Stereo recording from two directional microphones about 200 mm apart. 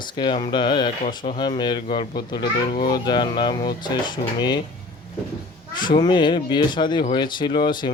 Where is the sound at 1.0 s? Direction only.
40° left (ahead or behind).